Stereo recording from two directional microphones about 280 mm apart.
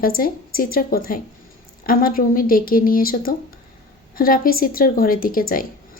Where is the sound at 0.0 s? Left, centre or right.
Left.